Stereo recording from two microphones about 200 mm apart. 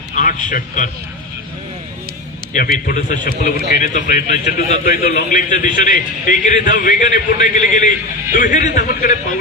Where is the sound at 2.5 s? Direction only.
45° left (ahead or behind).